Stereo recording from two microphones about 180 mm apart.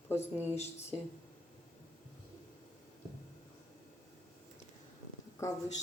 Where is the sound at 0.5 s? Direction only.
35° left (ahead or behind).